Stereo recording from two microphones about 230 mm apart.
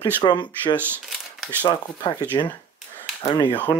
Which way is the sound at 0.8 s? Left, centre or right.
Centre.